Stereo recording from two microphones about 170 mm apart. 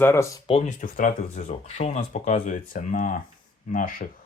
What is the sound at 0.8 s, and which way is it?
Speech, 50° left (ahead or behind).